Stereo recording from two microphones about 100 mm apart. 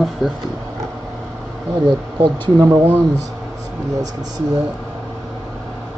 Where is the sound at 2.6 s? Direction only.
25° right (ahead or behind).